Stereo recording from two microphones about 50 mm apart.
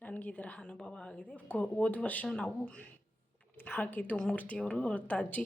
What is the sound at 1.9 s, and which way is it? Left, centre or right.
Speech, left.